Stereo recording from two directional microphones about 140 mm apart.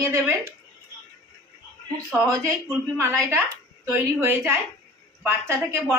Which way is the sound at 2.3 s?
20° right (ahead or behind).